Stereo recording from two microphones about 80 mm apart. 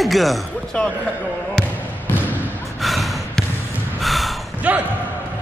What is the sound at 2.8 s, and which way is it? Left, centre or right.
Gasp, centre.